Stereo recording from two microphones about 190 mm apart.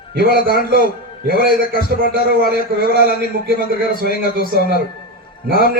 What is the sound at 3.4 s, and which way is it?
Speech, 55° right (ahead or behind).